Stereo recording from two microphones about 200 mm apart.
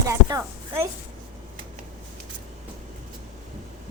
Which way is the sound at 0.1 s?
15° right (ahead or behind).